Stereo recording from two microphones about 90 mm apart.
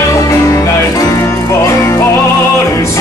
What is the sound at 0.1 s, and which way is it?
Music, 35° left (ahead or behind).